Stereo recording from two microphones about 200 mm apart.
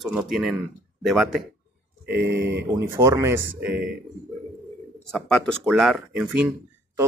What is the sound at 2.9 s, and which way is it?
Speech, 15° right (ahead or behind).